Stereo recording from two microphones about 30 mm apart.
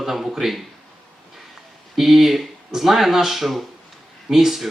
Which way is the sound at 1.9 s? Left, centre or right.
Centre.